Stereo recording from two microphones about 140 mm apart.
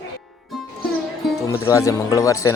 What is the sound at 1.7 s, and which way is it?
Speech, 20° left (ahead or behind).